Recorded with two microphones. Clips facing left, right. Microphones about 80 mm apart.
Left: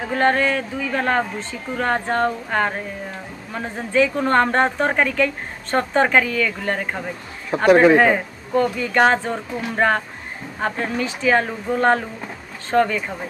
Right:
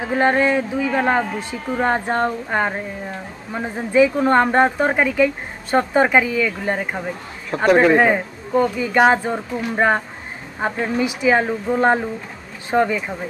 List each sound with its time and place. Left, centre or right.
0.1 s speech: centre
7.5 s speech: centre